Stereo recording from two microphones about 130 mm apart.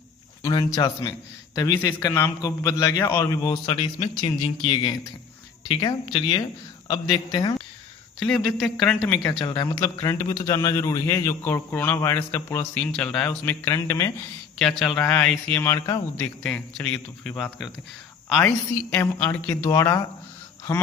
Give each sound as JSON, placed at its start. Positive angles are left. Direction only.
{"t": 0.4, "sound": "a man's voice", "side_deg": 25}
{"t": 3.4, "sound": "a man's voice", "side_deg": 35}
{"t": 8.2, "sound": "speech", "side_deg": 5}
{"t": 9.4, "sound": "speech", "side_deg": 40}
{"t": 9.6, "sound": "a man's voice", "side_deg": 20}
{"t": 14.6, "sound": "speech", "side_deg": 5}
{"t": 15.6, "sound": "a man's voice", "side_deg": 20}
{"t": 16.4, "sound": "speech", "side_deg": 10}
{"t": 18.9, "sound": "a man's voice", "side_deg": 15}